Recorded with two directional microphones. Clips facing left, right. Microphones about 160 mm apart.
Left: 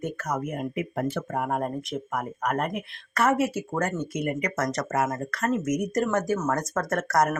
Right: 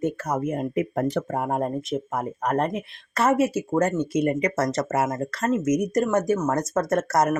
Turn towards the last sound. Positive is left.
turn(degrees=-20)  # may be behind; listen again after turning